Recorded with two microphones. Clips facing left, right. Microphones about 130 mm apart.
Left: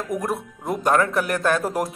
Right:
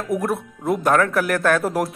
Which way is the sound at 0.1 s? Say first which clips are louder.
Right 5 dB; centre (ahead or behind).